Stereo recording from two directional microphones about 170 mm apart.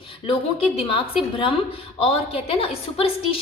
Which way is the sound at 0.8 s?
30° left (ahead or behind).